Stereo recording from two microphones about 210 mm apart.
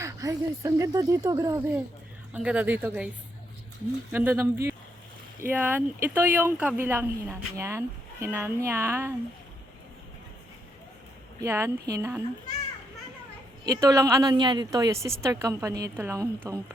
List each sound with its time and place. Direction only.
0.0 s speech: 15° right (ahead or behind)
4.1 s speech: 10° right (ahead or behind)
11.3 s speech: 10° right (ahead or behind)
13.8 s speech: 15° right (ahead or behind)